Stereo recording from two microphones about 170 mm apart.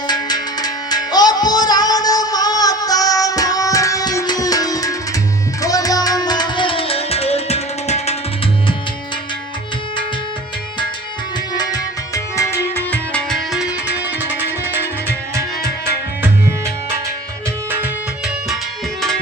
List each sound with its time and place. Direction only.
0.1 s music: 25° left (ahead or behind); by 8.1 s 40° left (ahead or behind)
11.5 s music: 25° left (ahead or behind); by 14.3 s 10° right (ahead or behind)